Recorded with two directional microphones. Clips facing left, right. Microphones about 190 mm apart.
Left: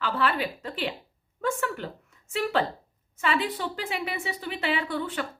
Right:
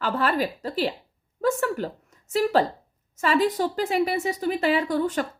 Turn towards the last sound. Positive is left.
turn(degrees=-40)  # may be behind; listen again after turning